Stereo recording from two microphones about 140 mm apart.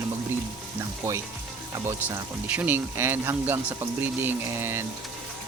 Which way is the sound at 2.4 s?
10° right (ahead or behind).